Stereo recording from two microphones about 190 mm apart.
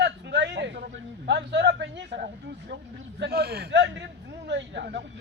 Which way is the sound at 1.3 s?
65° right (ahead or behind).